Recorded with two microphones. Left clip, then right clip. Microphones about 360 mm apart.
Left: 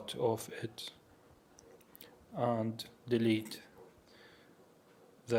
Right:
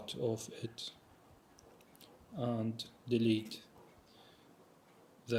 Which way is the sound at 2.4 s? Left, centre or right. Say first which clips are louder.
Left 5 dB; centre.